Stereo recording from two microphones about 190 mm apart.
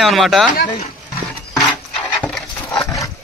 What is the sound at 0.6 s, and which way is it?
Speech, 35° left (ahead or behind).